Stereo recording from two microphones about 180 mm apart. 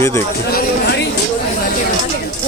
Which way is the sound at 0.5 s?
65° left (ahead or behind).